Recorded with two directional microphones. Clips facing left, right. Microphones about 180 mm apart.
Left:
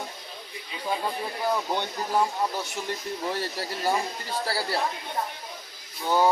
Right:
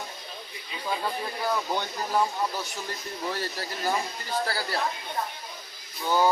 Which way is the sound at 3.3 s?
25° left (ahead or behind).